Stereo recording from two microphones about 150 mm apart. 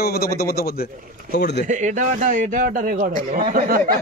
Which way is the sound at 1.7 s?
55° right (ahead or behind).